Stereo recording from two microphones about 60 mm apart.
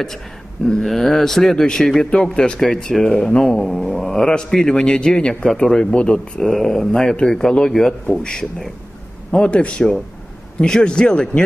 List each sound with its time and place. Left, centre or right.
0.7 s speech: centre